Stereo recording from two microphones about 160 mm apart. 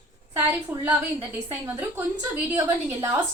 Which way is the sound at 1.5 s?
10° right (ahead or behind).